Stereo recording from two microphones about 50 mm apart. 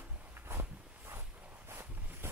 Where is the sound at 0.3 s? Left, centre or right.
Right.